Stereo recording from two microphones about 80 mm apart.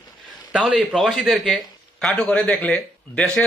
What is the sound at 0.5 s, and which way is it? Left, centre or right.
Speech, centre.